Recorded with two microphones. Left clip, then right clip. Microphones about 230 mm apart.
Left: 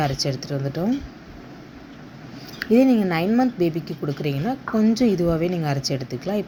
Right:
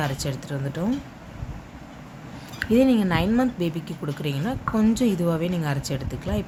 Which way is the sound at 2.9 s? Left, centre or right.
Centre.